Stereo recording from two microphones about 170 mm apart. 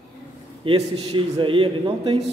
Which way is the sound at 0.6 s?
35° right (ahead or behind).